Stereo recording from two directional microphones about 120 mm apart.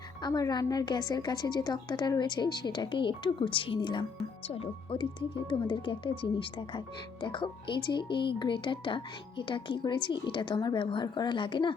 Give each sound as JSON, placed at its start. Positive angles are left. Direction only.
{"t": 0.2, "sound": "a woman's voice", "side_deg": 35}
{"t": 4.4, "sound": "speech", "side_deg": 55}